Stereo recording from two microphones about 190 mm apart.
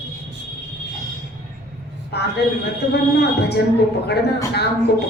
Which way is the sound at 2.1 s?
60° left (ahead or behind).